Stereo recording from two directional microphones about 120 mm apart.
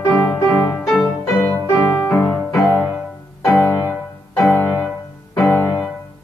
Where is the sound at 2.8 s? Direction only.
5° right (ahead or behind).